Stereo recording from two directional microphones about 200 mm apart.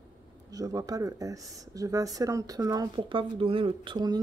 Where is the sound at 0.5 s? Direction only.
15° right (ahead or behind).